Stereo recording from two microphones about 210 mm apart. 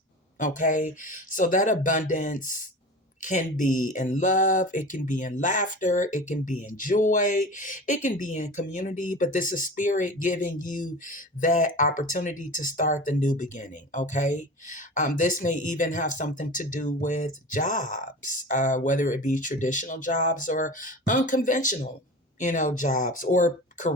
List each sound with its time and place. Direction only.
0.3 s speech: 40° left (ahead or behind)